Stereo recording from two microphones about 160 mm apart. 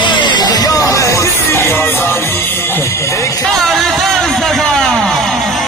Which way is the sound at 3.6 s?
Centre (ahead or behind).